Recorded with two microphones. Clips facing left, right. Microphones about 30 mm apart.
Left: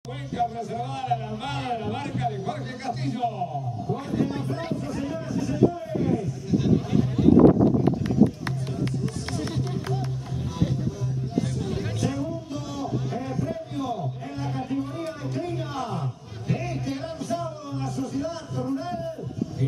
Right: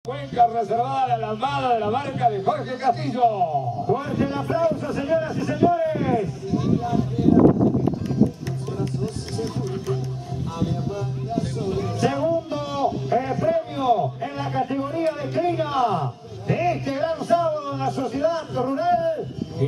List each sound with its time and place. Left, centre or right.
0.4 s a man's voice: right
0.9 s speech: centre
1.6 s a man's voice: right
1.9 s speech: centre
2.4 s a man's voice: right
3.4 s a man's voice: right
12.0 s music: right
14.8 s a sound: right